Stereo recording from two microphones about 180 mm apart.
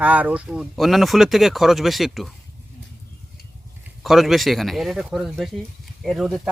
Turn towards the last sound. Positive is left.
turn(degrees=0)  # may be behind; listen again after turning